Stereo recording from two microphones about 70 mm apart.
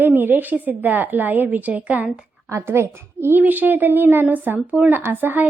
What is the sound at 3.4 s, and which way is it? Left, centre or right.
Speech, right.